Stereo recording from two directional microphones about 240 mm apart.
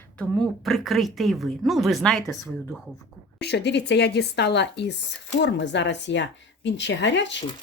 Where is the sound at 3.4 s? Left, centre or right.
Left.